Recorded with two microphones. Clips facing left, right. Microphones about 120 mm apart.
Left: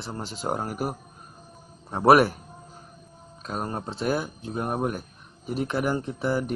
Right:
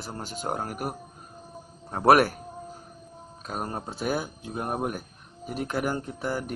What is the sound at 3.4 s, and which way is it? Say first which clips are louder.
Speech: left 2 dB; centre (ahead or behind).